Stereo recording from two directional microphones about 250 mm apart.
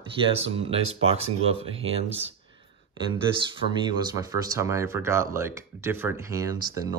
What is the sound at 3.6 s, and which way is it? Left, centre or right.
Speech, left.